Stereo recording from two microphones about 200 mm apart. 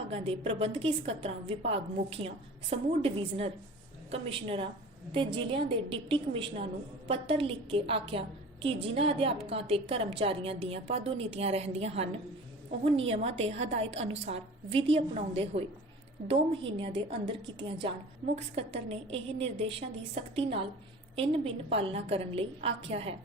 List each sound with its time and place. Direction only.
0.1 s a woman's voice: 30° right (ahead or behind)